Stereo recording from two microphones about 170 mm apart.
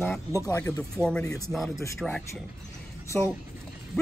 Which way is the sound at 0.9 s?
5° left (ahead or behind).